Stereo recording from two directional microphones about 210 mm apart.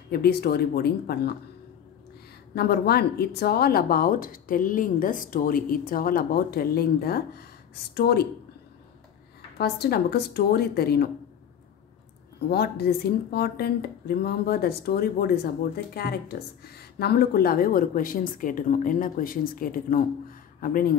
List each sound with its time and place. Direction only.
0.1 s speech: 45° left (ahead or behind)
2.5 s speech: 50° left (ahead or behind)
9.6 s speech: 50° left (ahead or behind)
12.4 s speech: 50° left (ahead or behind)